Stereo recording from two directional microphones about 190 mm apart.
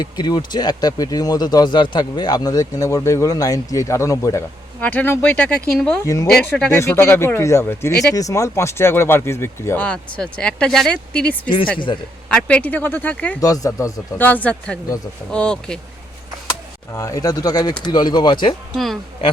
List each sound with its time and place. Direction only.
0.0 s speech: 25° left (ahead or behind); by 11.3 s 5° left (ahead or behind)
11.4 s speech: 25° left (ahead or behind)
12.3 s speech: 5° left (ahead or behind)
13.4 s speech: 20° left (ahead or behind)
16.5 s speech: 15° left (ahead or behind)
18.7 s speech: centre (ahead or behind)